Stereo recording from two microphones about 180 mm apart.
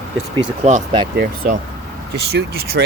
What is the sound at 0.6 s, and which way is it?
Speech, 40° right (ahead or behind).